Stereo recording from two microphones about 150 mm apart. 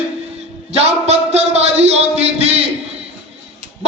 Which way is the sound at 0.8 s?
45° right (ahead or behind).